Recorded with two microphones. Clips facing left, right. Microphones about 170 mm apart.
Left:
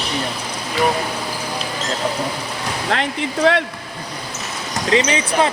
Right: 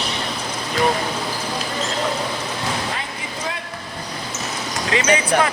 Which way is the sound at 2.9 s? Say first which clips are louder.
Left 8 dB; 75° left (ahead or behind).